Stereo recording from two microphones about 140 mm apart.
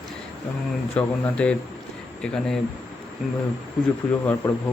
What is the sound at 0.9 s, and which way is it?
Speech, 10° left (ahead or behind).